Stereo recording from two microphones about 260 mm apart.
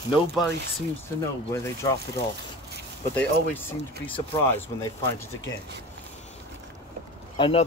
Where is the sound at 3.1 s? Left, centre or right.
Centre.